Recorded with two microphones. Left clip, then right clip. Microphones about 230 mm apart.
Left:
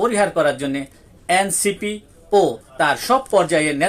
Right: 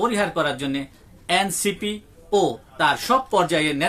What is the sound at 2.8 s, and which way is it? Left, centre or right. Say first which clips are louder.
Speech: left 2 dB; centre.